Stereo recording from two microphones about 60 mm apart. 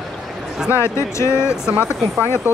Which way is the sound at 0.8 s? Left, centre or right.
Left.